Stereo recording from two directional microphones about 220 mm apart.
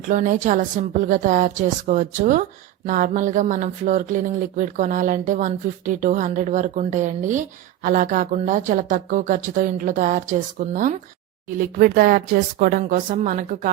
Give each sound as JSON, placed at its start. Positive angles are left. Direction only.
{"t": 0.1, "sound": "speech", "side_deg": -35}